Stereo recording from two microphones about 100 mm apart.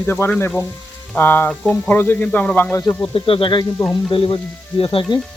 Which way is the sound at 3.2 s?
65° left (ahead or behind).